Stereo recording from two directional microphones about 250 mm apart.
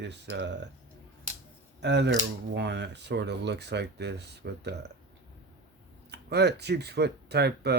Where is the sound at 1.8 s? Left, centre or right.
Right.